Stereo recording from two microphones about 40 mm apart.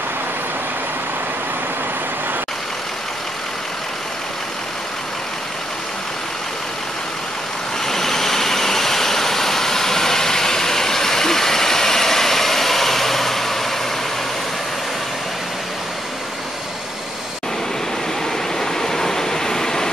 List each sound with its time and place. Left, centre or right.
7.8 s vehicle: centre
18.6 s waves: centre